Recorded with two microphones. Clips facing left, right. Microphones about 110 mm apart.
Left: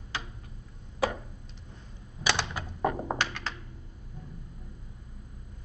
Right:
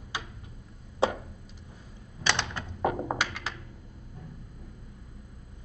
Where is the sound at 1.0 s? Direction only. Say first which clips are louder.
Right 2 dB; 25° right (ahead or behind).